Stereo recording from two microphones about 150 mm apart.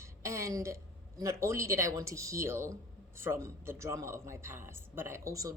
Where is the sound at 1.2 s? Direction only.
20° right (ahead or behind).